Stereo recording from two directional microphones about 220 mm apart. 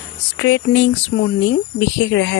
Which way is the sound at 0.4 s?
55° left (ahead or behind).